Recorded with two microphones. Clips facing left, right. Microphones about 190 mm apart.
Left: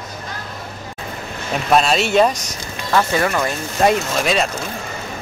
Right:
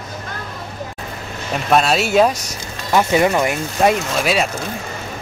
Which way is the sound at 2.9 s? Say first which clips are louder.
Right 3 dB; 20° right (ahead or behind).